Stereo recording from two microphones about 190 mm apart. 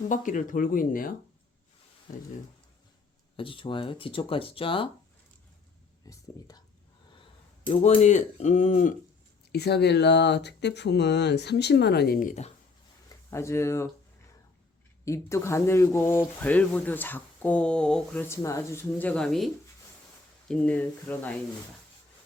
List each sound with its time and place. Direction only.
0.1 s speech: 45° left (ahead or behind)
3.3 s speech: 25° left (ahead or behind)
6.1 s a sound: 15° left (ahead or behind)
7.2 s speech: 30° left (ahead or behind)
9.5 s speech: 60° left (ahead or behind); by 12.5 s 45° left (ahead or behind)
13.1 s speech: 15° left (ahead or behind)
15.0 s speech: 15° left (ahead or behind)
20.5 s speech: 5° left (ahead or behind)